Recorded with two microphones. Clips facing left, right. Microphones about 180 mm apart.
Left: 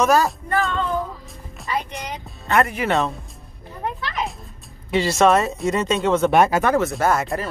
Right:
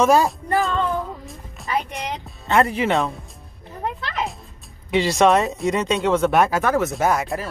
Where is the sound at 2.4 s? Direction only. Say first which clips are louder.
Right 1 dB; 25° right (ahead or behind).